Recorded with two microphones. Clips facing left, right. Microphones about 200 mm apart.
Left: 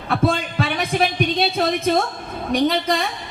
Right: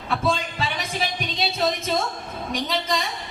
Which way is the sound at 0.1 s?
60° left (ahead or behind).